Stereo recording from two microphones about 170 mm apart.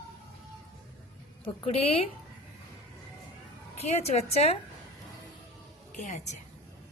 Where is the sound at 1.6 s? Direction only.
35° left (ahead or behind).